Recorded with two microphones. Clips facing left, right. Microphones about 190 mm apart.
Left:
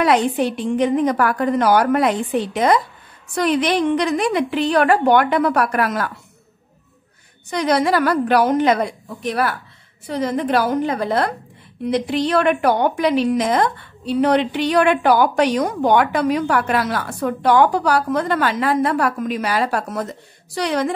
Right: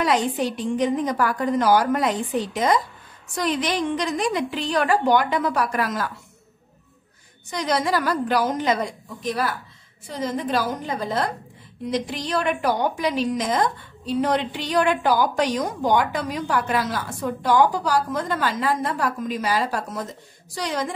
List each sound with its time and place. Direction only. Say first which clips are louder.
0.0 s a woman's voice: left 5 dB; 60° left (ahead or behind)
7.4 s a woman's voice: left 6 dB; 60° left (ahead or behind)